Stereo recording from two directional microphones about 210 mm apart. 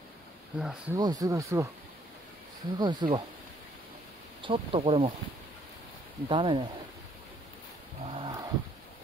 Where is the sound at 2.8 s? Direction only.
20° right (ahead or behind).